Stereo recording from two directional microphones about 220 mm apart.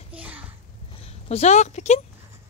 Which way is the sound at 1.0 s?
30° left (ahead or behind).